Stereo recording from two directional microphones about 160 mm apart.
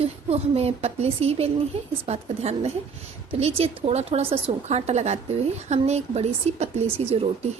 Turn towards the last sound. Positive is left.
turn(degrees=-40)  # may be behind; listen again after turning